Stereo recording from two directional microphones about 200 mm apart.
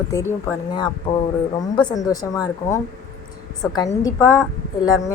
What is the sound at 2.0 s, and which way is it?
Speech, 15° left (ahead or behind).